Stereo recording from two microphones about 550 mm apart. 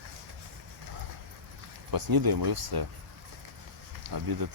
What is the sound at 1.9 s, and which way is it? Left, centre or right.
Speech, right.